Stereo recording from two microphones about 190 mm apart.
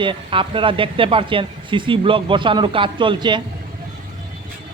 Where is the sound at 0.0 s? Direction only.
25° right (ahead or behind).